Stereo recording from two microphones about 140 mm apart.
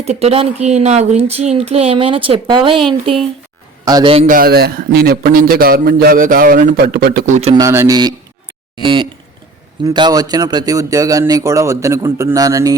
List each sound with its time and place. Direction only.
0.0 s speech: 50° right (ahead or behind)
3.8 s a man's voice: 30° right (ahead or behind)
4.3 s a man's voice: 90° right
7.5 s a man's voice: 20° right (ahead or behind)
8.8 s a man's voice: 35° right (ahead or behind)